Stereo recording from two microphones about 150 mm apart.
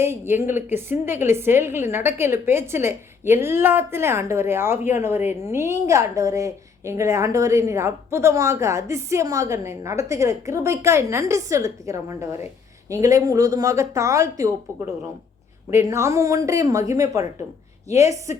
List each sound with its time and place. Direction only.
0.0 s a woman's voice: 15° right (ahead or behind)
15.7 s a woman's voice: 20° right (ahead or behind)